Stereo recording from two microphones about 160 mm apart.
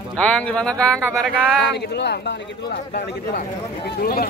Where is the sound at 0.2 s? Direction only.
5° left (ahead or behind).